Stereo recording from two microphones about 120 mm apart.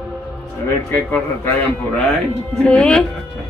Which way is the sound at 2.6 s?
10° left (ahead or behind).